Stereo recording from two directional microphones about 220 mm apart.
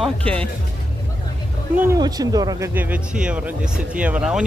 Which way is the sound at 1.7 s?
15° right (ahead or behind).